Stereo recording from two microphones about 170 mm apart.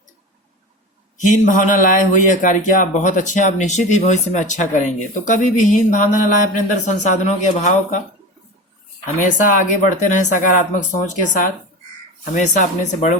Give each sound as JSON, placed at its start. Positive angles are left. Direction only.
{"t": 1.2, "sound": "speech", "side_deg": 50}
{"t": 9.0, "sound": "speech", "side_deg": 50}